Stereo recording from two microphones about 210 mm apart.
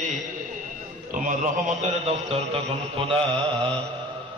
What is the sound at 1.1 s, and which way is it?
A man's voice, 35° right (ahead or behind).